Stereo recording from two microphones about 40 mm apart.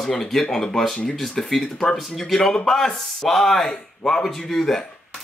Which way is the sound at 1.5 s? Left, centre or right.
Centre.